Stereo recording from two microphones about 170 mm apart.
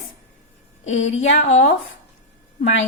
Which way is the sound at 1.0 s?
90° left.